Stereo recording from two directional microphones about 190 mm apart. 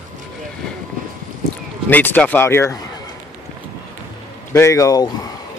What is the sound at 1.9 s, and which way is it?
Speech, 10° left (ahead or behind).